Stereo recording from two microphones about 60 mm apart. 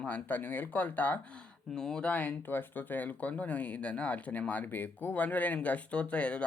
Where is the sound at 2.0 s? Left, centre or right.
Left.